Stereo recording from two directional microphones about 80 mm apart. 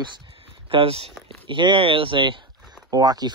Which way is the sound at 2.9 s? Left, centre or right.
Right.